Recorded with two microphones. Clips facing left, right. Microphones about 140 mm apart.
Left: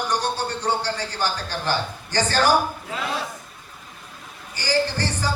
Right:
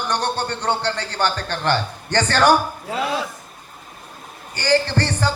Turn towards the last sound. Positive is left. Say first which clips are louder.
# right 2 dB
turn(degrees=-65)  # may be behind; listen again after turning